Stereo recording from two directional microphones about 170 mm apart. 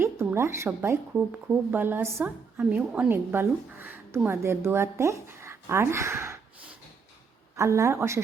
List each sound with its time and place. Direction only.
0.0 s speech: 15° right (ahead or behind)
7.5 s speech: 15° right (ahead or behind)